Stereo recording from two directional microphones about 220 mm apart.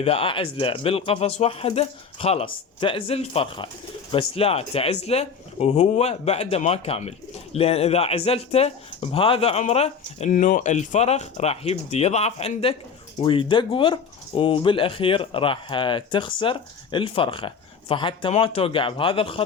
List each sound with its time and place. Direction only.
0.0 s speech: 25° left (ahead or behind)